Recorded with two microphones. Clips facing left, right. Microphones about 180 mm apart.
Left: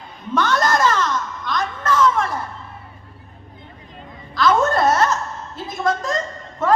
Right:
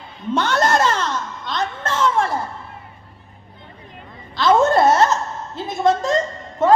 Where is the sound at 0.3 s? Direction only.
25° right (ahead or behind).